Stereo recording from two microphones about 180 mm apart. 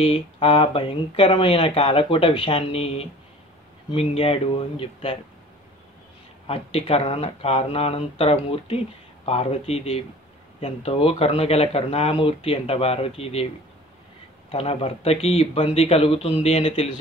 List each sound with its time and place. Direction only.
0.0 s speech: 30° left (ahead or behind)
6.4 s speech: 30° left (ahead or behind)
14.5 s speech: 35° left (ahead or behind)